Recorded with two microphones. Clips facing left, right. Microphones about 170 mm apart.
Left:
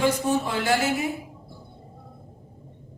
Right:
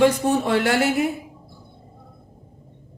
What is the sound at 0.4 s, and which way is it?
Speech, 65° right (ahead or behind).